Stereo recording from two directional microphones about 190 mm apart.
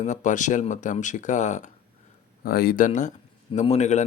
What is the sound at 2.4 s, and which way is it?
A man's voice, 50° left (ahead or behind).